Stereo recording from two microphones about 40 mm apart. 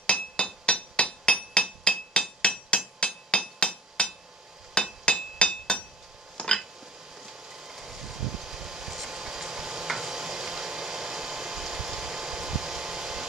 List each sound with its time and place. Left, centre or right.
0.0 s hammer: left
5.4 s a sound: left
7.2 s vehicle: centre